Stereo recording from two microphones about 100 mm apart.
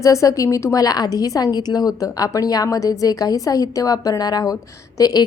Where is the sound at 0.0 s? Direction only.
30° left (ahead or behind).